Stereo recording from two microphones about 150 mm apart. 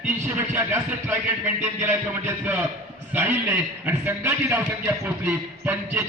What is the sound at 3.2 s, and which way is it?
A man's voice, 15° right (ahead or behind).